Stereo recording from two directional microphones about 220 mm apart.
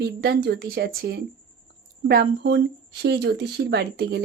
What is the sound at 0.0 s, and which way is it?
A woman's voice, 50° right (ahead or behind).